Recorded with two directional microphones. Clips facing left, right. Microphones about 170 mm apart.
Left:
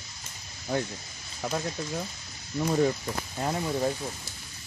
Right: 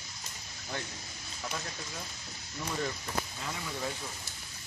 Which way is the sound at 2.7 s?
45° left (ahead or behind).